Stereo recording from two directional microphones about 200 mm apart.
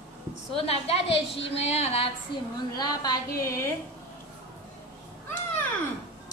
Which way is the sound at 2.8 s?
20° left (ahead or behind).